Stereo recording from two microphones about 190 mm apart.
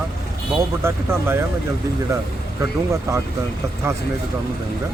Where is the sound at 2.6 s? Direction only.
15° right (ahead or behind).